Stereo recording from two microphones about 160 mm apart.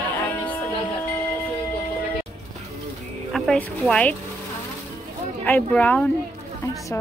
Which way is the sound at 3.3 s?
5° left (ahead or behind).